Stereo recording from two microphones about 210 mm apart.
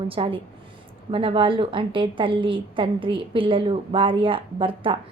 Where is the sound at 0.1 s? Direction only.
25° right (ahead or behind).